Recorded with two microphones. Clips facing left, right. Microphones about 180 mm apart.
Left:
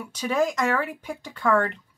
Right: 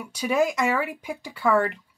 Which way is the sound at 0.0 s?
10° right (ahead or behind).